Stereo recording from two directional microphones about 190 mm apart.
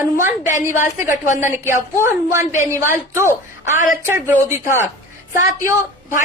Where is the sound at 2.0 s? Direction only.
15° right (ahead or behind).